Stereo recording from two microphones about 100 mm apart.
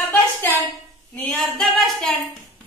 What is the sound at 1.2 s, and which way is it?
Speech, 5° left (ahead or behind).